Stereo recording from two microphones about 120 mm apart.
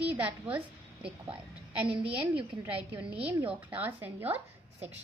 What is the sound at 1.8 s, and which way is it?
Speech, 50° right (ahead or behind).